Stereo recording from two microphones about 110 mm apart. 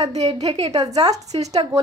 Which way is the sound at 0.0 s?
75° right (ahead or behind).